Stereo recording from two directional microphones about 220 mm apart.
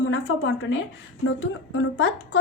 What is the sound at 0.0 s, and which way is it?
A woman's voice, 60° left (ahead or behind).